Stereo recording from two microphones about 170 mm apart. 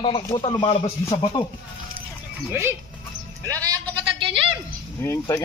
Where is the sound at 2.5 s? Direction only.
15° right (ahead or behind).